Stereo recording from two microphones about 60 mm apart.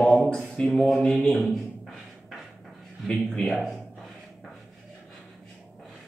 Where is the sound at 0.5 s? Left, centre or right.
Centre.